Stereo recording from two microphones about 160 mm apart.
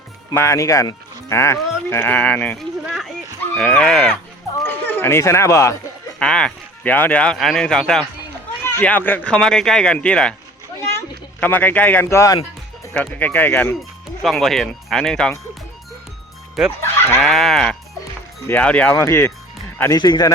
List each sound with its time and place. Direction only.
0.3 s speech: 20° left (ahead or behind)
6.1 s speech: 5° left (ahead or behind)
11.3 s speech: 10° left (ahead or behind)
14.2 s speech: centre (ahead or behind)
16.6 s speech: centre (ahead or behind); by 20.3 s 25° left (ahead or behind)